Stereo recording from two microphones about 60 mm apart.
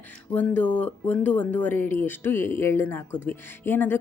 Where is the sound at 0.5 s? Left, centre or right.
Left.